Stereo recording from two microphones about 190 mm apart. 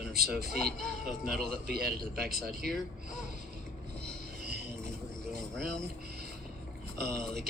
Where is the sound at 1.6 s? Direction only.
55° right (ahead or behind).